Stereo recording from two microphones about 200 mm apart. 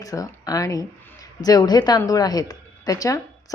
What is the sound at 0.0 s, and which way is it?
Speech, 15° left (ahead or behind).